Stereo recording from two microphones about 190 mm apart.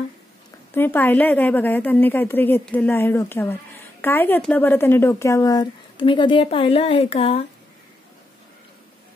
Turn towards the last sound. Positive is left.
turn(degrees=30)  # may be behind; listen again after turning